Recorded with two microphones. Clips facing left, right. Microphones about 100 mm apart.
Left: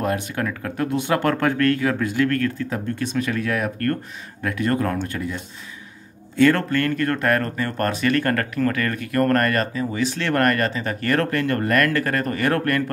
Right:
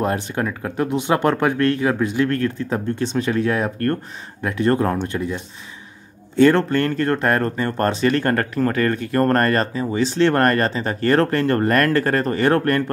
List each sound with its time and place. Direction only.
0.0 s speech: 25° right (ahead or behind)